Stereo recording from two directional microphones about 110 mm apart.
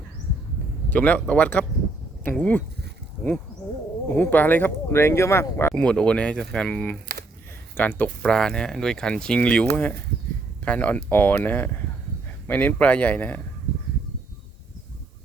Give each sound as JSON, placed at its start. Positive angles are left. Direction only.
{"t": 0.9, "sound": "speech", "side_deg": 15}
{"t": 4.1, "sound": "speech", "side_deg": 15}
{"t": 5.7, "sound": "speech", "side_deg": 10}